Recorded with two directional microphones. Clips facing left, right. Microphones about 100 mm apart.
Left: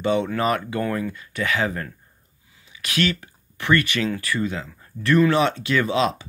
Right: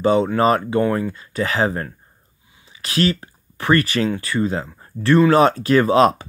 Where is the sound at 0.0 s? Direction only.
35° right (ahead or behind).